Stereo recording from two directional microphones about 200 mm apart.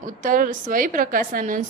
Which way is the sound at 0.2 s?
40° right (ahead or behind).